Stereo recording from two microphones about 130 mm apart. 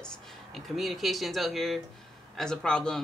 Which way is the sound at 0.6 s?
Centre (ahead or behind).